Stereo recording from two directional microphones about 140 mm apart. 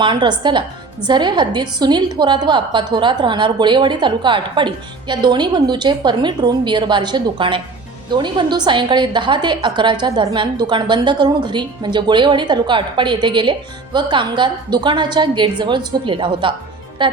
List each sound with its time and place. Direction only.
0.0 s a woman's voice: 35° right (ahead or behind)